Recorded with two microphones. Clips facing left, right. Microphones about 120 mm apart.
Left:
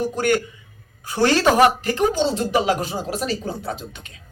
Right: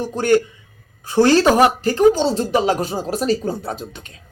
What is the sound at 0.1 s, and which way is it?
Speech, 30° right (ahead or behind).